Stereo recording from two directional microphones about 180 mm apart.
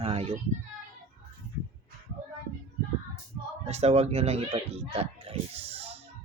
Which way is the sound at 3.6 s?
35° right (ahead or behind).